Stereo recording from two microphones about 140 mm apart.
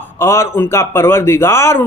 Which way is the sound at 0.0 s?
20° left (ahead or behind).